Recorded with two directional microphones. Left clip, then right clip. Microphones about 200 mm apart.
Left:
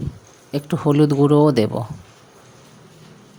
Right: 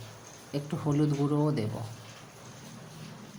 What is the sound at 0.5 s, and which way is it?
Speech, 45° left (ahead or behind).